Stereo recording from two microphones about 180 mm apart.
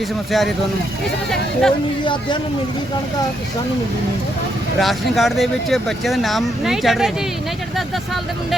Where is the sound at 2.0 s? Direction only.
25° left (ahead or behind).